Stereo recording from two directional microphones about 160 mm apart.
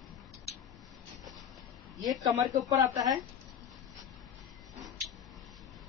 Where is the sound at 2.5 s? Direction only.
20° right (ahead or behind).